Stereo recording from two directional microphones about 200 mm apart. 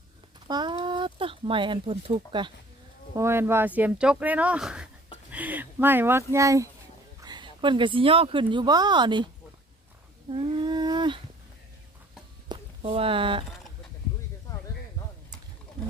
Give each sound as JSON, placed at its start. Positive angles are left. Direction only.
{"t": 0.4, "sound": "speech", "side_deg": -20}
{"t": 3.2, "sound": "speech", "side_deg": -10}
{"t": 10.3, "sound": "humming", "side_deg": -25}
{"t": 12.5, "sound": "a sound", "side_deg": -25}